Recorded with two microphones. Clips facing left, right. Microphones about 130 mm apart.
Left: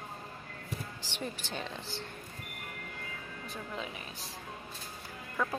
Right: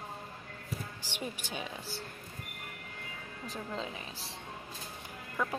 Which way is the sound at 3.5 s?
30° right (ahead or behind).